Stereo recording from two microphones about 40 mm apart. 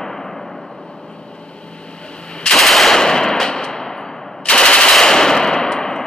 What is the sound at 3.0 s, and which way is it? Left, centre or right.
Machine gun, centre.